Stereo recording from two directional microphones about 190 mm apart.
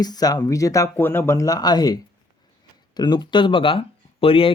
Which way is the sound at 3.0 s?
20° left (ahead or behind).